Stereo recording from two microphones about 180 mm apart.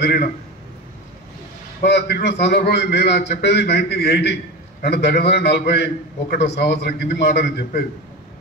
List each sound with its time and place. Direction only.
0.0 s a man's voice: 65° left (ahead or behind)
1.9 s a man's voice: 65° left (ahead or behind)